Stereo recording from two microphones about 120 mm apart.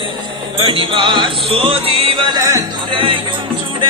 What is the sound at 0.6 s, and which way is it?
Music, 50° right (ahead or behind).